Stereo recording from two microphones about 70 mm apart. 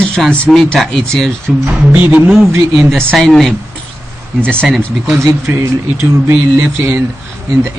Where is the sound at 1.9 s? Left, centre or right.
Right.